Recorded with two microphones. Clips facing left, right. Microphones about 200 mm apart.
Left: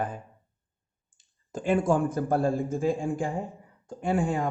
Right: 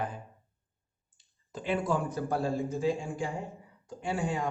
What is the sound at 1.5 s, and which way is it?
Speech, 50° left (ahead or behind).